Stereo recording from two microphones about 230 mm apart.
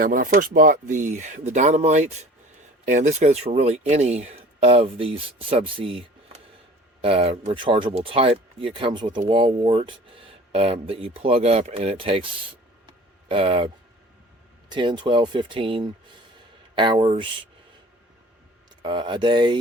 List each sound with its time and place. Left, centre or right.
0.0 s speech: right
12.8 s a sound: right
14.7 s speech: centre
18.8 s speech: right